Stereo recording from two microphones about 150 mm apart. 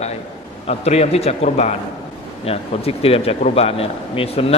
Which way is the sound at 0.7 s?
45° left (ahead or behind).